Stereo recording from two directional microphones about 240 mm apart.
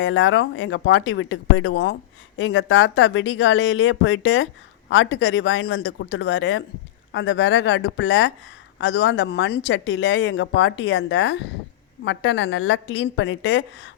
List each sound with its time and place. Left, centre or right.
0.0 s speech: left